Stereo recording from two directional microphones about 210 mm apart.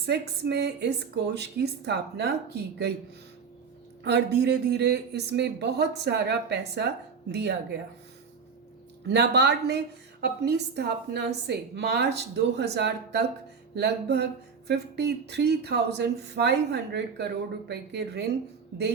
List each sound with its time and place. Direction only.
0.0 s speech: 50° right (ahead or behind)
4.0 s speech: 55° right (ahead or behind)
9.0 s speech: 50° right (ahead or behind)